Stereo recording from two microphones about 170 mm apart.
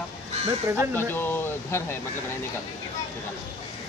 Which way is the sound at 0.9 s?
15° left (ahead or behind).